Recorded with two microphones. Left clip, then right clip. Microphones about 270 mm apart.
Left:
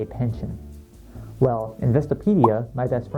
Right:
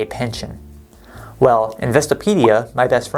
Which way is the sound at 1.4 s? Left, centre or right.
Centre.